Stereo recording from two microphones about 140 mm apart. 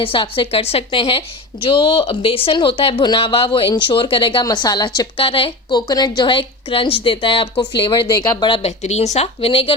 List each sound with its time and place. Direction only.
0.0 s a woman's voice: 35° left (ahead or behind)